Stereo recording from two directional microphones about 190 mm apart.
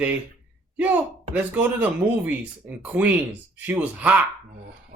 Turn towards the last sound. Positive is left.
turn(degrees=-10)  # may be behind; listen again after turning